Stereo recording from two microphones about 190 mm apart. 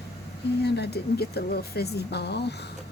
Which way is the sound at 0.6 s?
60° left (ahead or behind).